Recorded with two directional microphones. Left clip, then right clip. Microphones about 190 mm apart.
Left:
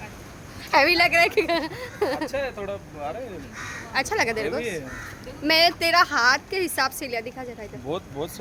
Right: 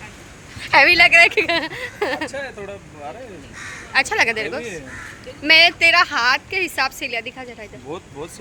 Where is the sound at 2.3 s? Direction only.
30° left (ahead or behind).